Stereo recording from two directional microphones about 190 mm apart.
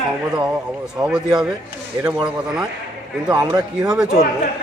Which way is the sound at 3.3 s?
15° right (ahead or behind).